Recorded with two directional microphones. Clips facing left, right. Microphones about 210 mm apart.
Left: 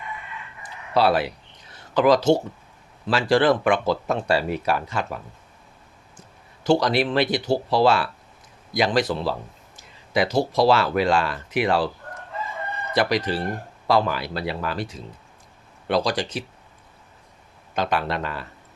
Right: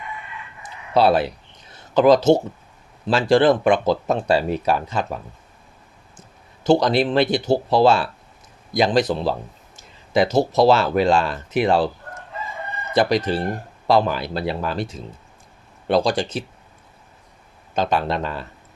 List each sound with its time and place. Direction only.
0.9 s speech: 25° right (ahead or behind)
6.7 s speech: 20° right (ahead or behind)
12.9 s speech: 25° right (ahead or behind)
17.7 s speech: 25° right (ahead or behind)